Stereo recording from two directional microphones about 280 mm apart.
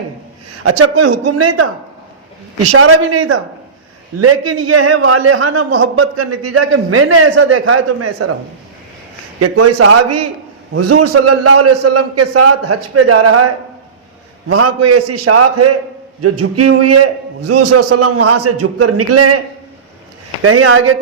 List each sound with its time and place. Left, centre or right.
0.6 s a man's voice: right
2.7 s a man's voice: right
9.4 s a man's voice: right
14.5 s a man's voice: right
20.4 s a man's voice: right